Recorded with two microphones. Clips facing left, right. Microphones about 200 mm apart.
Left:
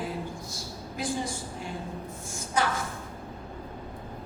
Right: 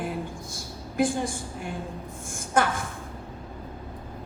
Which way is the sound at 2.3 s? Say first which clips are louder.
Right 4 dB; 55° right (ahead or behind).